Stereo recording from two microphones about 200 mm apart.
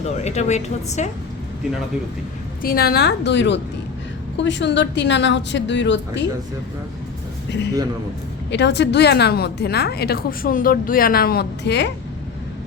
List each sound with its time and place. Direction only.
0.2 s a woman's voice: 35° left (ahead or behind)
2.6 s a woman's voice: 50° left (ahead or behind)
8.4 s a woman's voice: 60° left (ahead or behind)